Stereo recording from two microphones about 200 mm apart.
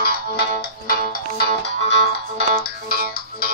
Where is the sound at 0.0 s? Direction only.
50° left (ahead or behind).